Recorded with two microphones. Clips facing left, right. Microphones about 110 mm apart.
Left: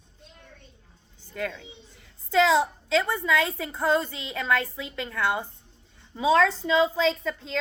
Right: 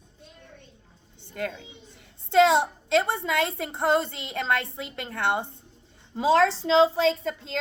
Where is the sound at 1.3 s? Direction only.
40° right (ahead or behind).